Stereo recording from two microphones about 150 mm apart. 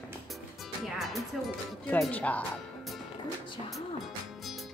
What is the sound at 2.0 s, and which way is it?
Speech, 10° left (ahead or behind).